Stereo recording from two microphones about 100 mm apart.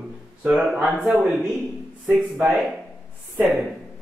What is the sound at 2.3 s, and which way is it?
Speech, 20° right (ahead or behind).